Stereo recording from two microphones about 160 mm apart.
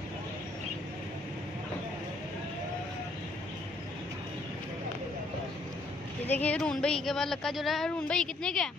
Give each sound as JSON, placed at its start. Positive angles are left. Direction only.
{"t": 6.2, "sound": "a woman's voice", "side_deg": 10}